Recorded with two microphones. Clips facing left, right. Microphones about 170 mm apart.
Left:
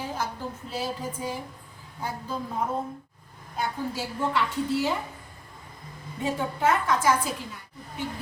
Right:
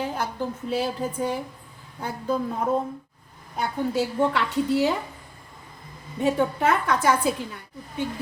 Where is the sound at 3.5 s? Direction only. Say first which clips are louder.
Right 5 dB; 65° right (ahead or behind).